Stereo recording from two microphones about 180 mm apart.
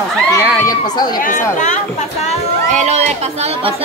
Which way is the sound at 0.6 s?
20° left (ahead or behind).